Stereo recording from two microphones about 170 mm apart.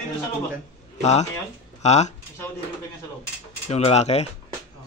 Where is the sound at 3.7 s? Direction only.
40° left (ahead or behind).